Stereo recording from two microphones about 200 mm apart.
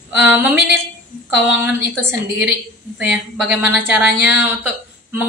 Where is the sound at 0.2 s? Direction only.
10° right (ahead or behind).